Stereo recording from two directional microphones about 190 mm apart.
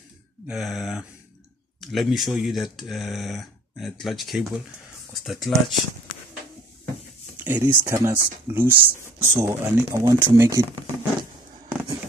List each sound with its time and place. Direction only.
0.5 s speech: centre (ahead or behind)
7.4 s speech: 10° right (ahead or behind)
10.1 s speech: 25° right (ahead or behind)